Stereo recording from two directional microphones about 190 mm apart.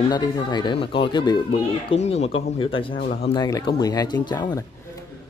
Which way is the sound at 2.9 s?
50° left (ahead or behind).